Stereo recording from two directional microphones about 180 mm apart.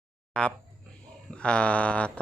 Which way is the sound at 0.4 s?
5° left (ahead or behind).